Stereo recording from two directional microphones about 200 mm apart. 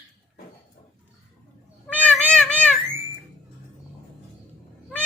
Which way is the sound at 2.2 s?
5° left (ahead or behind).